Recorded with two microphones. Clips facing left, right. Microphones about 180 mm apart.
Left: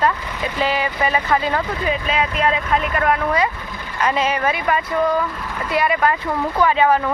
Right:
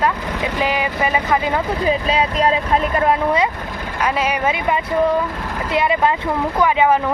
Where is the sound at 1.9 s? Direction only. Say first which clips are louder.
Right 4 dB; 35° right (ahead or behind).